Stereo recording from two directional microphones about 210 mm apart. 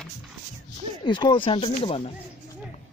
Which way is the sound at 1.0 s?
20° left (ahead or behind).